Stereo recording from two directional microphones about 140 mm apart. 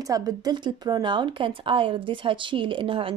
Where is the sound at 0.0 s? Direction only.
25° right (ahead or behind).